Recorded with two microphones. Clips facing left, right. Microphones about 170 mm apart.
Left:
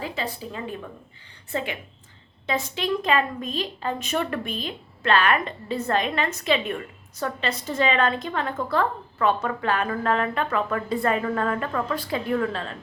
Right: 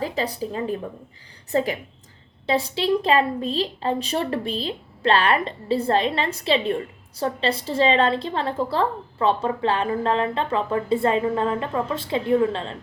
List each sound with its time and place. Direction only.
0.0 s a woman's voice: 40° right (ahead or behind)